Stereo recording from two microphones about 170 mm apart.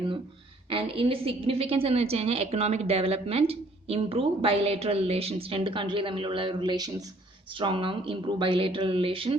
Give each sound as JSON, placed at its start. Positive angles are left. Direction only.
{"t": 0.7, "sound": "a woman's voice", "side_deg": -30}